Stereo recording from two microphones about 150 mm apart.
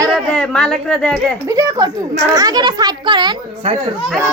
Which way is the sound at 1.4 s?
20° right (ahead or behind).